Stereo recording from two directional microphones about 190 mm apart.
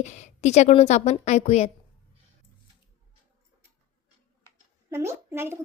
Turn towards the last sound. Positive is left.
turn(degrees=-15)  # may be behind; listen again after turning